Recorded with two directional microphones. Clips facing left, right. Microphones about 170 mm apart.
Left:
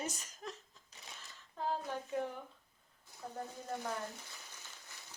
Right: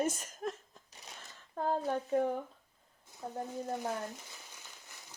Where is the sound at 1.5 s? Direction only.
50° right (ahead or behind).